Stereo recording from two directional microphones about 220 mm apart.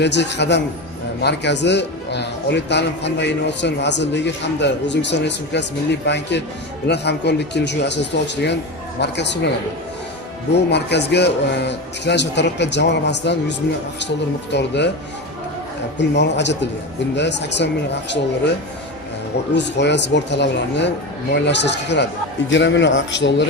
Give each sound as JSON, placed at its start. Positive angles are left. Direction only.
{"t": 0.0, "sound": "speech", "side_deg": 50}
{"t": 10.5, "sound": "speech", "side_deg": 50}
{"t": 16.0, "sound": "speech", "side_deg": 50}
{"t": 19.5, "sound": "a man's voice", "side_deg": 50}